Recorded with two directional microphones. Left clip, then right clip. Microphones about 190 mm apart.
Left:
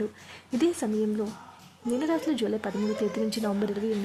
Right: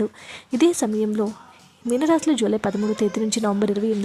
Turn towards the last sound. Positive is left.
turn(degrees=-30)  # may be behind; listen again after turning